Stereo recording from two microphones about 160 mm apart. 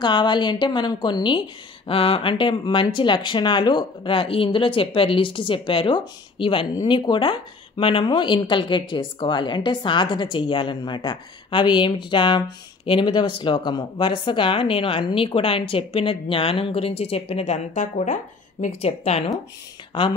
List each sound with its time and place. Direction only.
0.0 s a woman's voice: 30° left (ahead or behind)